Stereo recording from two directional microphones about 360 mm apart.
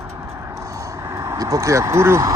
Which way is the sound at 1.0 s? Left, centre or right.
Centre.